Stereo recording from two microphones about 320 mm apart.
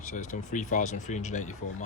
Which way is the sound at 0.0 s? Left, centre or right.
Left.